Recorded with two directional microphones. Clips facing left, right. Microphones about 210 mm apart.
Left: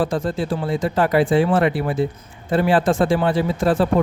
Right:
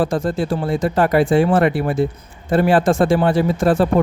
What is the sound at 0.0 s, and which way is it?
Speech, 45° right (ahead or behind).